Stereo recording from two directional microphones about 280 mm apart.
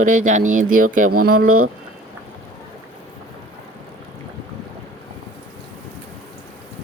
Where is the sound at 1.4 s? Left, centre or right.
Right.